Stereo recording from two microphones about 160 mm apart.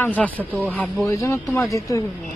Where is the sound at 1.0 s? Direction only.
20° left (ahead or behind).